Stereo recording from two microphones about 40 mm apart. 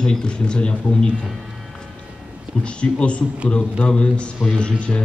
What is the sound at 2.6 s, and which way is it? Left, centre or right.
Speech, left.